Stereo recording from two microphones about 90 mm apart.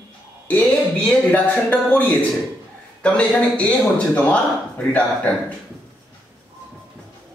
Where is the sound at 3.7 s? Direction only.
15° left (ahead or behind).